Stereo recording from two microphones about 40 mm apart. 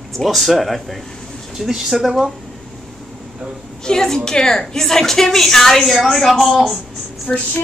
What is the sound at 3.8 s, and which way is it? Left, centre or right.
A woman's voice, centre.